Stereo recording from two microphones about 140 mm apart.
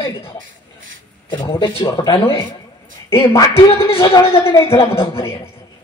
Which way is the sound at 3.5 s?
45° left (ahead or behind).